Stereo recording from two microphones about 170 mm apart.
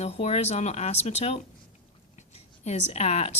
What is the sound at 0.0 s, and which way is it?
Speech, 40° left (ahead or behind).